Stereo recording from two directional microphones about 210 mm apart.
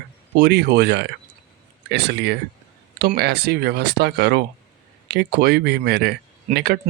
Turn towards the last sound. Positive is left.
turn(degrees=-50)  # may be behind; listen again after turning